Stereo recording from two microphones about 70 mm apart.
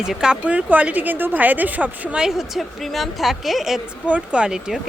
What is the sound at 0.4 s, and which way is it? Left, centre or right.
A woman's voice, right.